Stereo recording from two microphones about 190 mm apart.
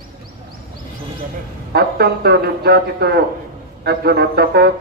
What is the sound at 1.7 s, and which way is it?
Speech, 55° right (ahead or behind).